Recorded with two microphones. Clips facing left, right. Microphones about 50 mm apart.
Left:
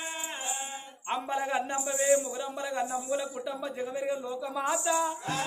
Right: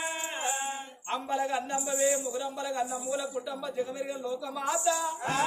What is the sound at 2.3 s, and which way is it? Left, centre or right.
Speech, centre.